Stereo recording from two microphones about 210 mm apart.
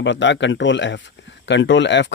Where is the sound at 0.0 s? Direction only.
60° left (ahead or behind).